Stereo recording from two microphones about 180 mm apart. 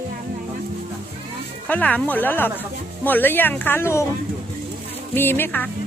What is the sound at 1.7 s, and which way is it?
Speech, 10° left (ahead or behind).